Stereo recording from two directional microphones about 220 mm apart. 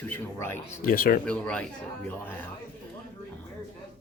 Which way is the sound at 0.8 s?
40° left (ahead or behind).